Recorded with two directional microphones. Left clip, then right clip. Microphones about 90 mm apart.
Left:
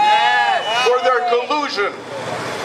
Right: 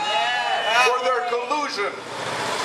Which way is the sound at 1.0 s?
10° left (ahead or behind).